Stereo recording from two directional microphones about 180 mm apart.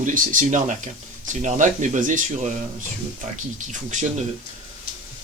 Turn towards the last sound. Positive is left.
turn(degrees=-40)  # may be behind; listen again after turning